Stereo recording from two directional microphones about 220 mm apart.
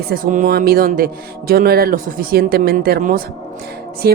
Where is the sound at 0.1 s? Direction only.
40° right (ahead or behind).